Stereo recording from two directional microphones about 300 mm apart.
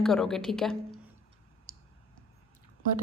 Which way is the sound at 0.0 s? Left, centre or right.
Centre.